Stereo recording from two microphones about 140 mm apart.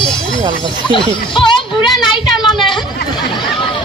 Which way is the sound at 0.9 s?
35° left (ahead or behind).